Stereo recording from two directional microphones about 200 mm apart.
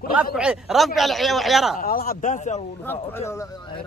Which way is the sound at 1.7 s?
45° left (ahead or behind).